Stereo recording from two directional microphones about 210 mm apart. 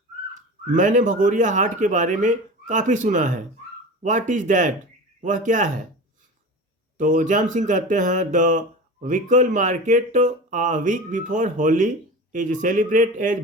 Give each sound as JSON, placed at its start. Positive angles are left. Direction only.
{"t": 0.7, "sound": "speech", "side_deg": -40}
{"t": 6.9, "sound": "speech", "side_deg": -40}